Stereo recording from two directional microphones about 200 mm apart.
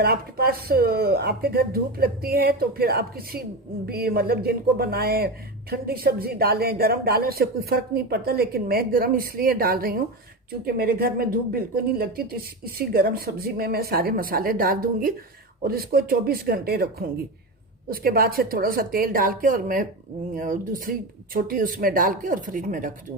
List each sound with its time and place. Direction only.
0.0 s a woman's voice: 50° right (ahead or behind)